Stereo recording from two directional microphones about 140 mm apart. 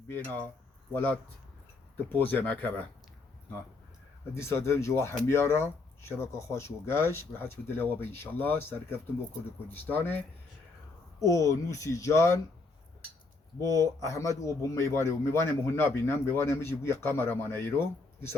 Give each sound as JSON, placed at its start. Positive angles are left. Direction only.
{"t": 2.1, "sound": "a man's voice", "side_deg": 10}
{"t": 4.4, "sound": "a man's voice", "side_deg": 20}
{"t": 13.7, "sound": "a man's voice", "side_deg": 25}